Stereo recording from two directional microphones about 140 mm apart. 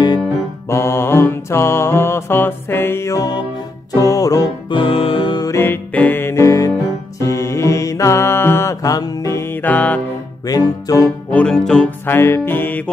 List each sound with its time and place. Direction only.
0.7 s mantra: 20° left (ahead or behind)
3.9 s music: 25° left (ahead or behind)
4.7 s music: 40° left (ahead or behind); by 10.0 s 10° left (ahead or behind)
10.4 s music: 25° left (ahead or behind)
11.3 s music: 5° left (ahead or behind)
12.2 s music: 15° left (ahead or behind)